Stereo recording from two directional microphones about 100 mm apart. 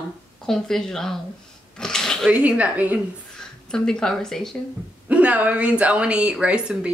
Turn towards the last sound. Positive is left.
turn(degrees=-10)  # may be behind; listen again after turning